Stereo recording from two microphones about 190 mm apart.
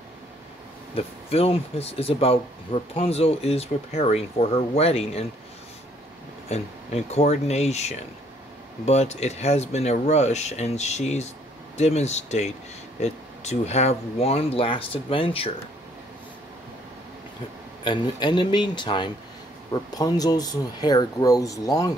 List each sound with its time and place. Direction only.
0.9 s speech: 30° left (ahead or behind)
6.5 s speech: 35° left (ahead or behind)
17.8 s speech: 25° left (ahead or behind)